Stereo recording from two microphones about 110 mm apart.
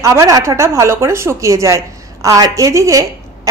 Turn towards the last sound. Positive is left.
turn(degrees=-30)  # may be behind; listen again after turning